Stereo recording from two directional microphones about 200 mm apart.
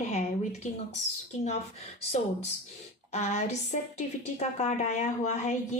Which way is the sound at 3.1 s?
35° left (ahead or behind).